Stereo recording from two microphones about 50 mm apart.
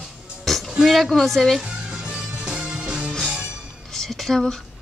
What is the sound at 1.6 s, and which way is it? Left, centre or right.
Music, right.